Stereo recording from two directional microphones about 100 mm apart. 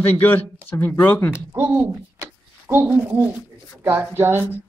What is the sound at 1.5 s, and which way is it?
A woman's voice, 20° right (ahead or behind).